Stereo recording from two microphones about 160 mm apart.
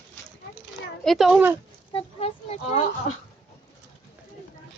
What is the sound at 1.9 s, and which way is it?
Speech, 35° left (ahead or behind).